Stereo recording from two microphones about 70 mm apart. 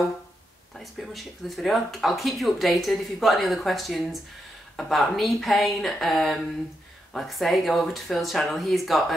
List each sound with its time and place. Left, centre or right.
0.7 s speech: centre